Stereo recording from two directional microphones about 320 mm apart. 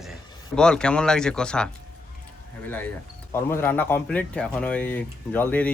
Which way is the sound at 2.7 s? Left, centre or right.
Centre.